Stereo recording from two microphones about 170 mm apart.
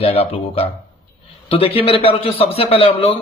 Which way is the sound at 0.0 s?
35° left (ahead or behind).